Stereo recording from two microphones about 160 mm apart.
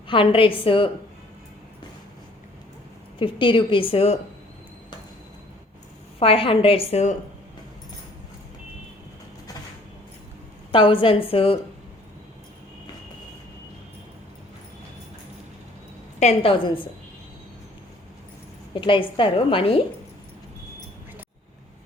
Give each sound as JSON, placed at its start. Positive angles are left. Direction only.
{"t": 0.1, "sound": "a woman's voice", "side_deg": 35}
{"t": 3.2, "sound": "a woman's voice", "side_deg": 30}
{"t": 6.1, "sound": "a woman's voice", "side_deg": 35}
{"t": 10.7, "sound": "a woman's voice", "side_deg": 35}
{"t": 16.2, "sound": "a woman's voice", "side_deg": 35}
{"t": 18.7, "sound": "a woman's voice", "side_deg": 30}